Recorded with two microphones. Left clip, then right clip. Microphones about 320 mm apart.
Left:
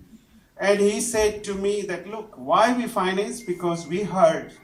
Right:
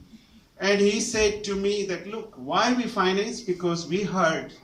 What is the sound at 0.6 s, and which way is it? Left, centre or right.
A man's voice, centre.